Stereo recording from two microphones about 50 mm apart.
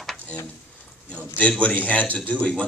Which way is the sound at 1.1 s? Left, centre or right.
Left.